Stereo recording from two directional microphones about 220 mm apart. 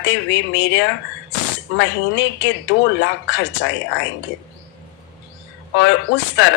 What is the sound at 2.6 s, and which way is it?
Speech, 55° left (ahead or behind).